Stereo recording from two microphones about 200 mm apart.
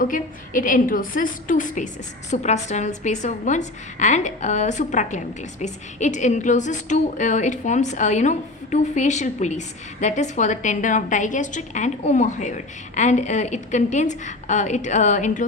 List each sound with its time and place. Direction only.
0.0 s a woman's voice: 40° left (ahead or behind)